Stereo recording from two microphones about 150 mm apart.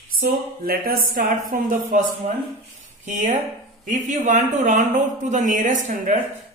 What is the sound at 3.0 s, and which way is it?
Speech, 55° right (ahead or behind).